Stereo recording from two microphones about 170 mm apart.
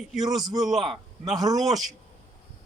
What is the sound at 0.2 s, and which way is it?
A man's voice, centre (ahead or behind).